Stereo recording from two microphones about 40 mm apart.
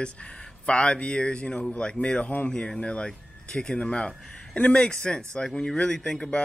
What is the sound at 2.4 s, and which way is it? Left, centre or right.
Speech, left.